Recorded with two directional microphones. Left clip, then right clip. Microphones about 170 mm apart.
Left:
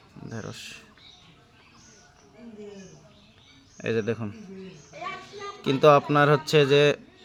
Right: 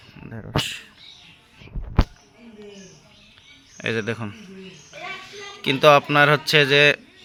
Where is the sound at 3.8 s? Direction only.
Centre (ahead or behind).